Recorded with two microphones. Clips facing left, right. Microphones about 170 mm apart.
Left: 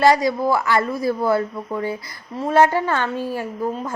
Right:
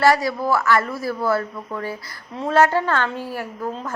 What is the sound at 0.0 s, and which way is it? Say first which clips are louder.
Speech: left 2 dB; 15° left (ahead or behind).